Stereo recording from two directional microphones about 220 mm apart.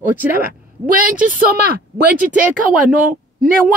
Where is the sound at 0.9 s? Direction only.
40° right (ahead or behind).